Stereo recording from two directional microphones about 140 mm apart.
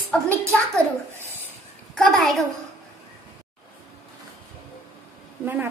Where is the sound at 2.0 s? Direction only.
Centre (ahead or behind).